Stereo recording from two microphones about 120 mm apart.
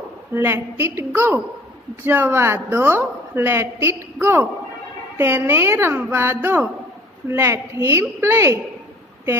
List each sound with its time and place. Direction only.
0.3 s a woman's voice: 20° right (ahead or behind)